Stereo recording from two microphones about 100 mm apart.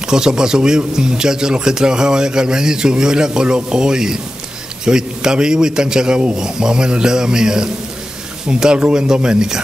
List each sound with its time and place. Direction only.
0.0 s speech: 5° right (ahead or behind)